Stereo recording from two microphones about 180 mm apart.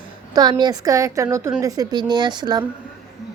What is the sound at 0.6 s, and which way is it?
A woman's voice, 20° right (ahead or behind).